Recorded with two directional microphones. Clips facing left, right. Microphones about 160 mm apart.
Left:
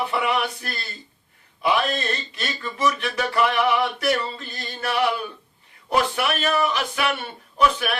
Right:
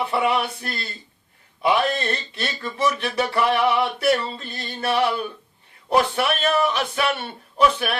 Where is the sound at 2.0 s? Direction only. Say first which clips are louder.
Right 2 dB; 30° right (ahead or behind).